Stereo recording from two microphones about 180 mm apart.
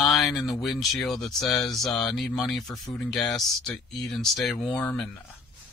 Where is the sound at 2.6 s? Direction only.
20° left (ahead or behind).